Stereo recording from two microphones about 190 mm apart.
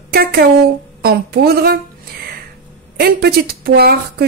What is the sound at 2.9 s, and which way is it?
Speech, 55° right (ahead or behind).